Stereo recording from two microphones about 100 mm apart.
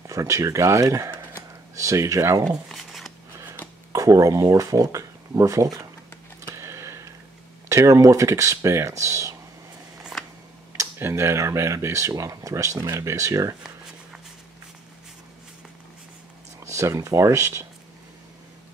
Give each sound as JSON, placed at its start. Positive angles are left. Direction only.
{"t": 0.0, "sound": "speech", "side_deg": -35}
{"t": 2.7, "sound": "a sound", "side_deg": 0}
{"t": 3.9, "sound": "speech", "side_deg": -35}
{"t": 6.4, "sound": "a sound", "side_deg": -30}
{"t": 7.6, "sound": "speech", "side_deg": -30}
{"t": 10.8, "sound": "speech", "side_deg": -25}
{"t": 16.5, "sound": "speech", "side_deg": -30}